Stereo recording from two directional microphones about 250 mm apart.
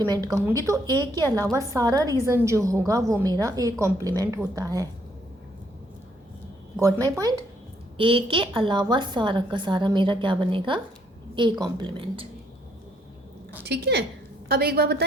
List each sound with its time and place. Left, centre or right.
0.1 s a woman's voice: centre
6.7 s a woman's voice: centre
13.7 s a woman's voice: right